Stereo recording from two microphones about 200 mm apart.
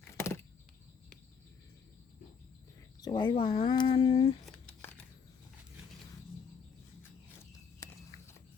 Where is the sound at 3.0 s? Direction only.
20° left (ahead or behind).